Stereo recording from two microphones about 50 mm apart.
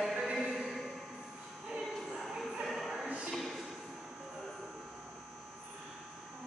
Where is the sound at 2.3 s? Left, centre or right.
Centre.